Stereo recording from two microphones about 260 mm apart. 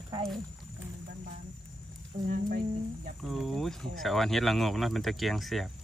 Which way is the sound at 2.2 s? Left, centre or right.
Right.